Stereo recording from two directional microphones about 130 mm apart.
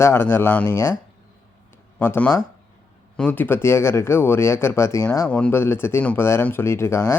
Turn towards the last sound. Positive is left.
turn(degrees=20)  # may be behind; listen again after turning